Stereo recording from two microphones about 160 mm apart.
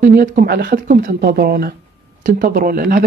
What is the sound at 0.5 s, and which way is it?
Speech, 80° right.